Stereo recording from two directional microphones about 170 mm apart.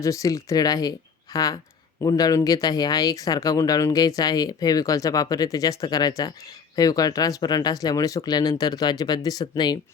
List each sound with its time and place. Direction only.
0.0 s speech: 20° left (ahead or behind)